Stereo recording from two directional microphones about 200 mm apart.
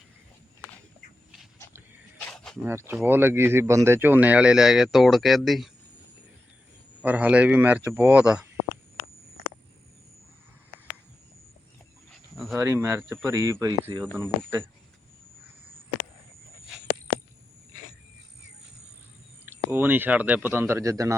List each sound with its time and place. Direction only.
2.2 s wild animals: centre (ahead or behind)
2.6 s speech: 10° right (ahead or behind)
7.0 s speech: 10° right (ahead or behind)
12.1 s dog: centre (ahead or behind)
12.5 s speech: 10° right (ahead or behind)
19.5 s speech: 10° right (ahead or behind)